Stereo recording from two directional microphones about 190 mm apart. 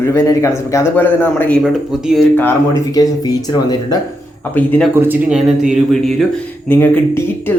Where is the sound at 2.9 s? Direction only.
20° left (ahead or behind).